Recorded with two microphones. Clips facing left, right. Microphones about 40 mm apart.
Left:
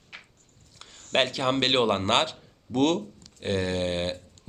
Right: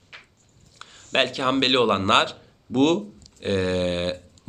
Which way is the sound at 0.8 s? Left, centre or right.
Right.